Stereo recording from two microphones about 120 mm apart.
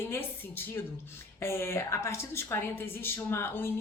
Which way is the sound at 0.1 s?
20° left (ahead or behind).